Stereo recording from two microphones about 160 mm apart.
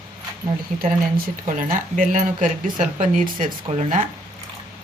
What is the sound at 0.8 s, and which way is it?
Speech, 60° right (ahead or behind).